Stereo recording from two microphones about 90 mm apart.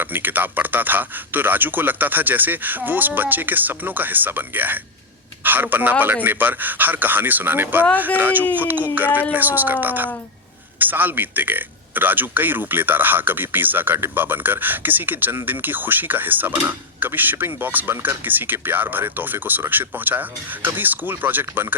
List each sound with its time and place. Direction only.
0.0 s speech: 20° right (ahead or behind)